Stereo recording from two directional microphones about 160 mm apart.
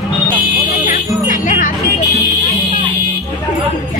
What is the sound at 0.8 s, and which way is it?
Music, 50° left (ahead or behind).